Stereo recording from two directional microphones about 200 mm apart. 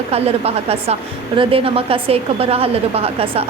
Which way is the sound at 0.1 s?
30° right (ahead or behind).